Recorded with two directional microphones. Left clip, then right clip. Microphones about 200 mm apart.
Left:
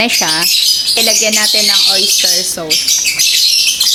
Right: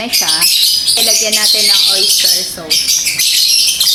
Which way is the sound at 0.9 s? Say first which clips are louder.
Left 1 dB; 40° left (ahead or behind).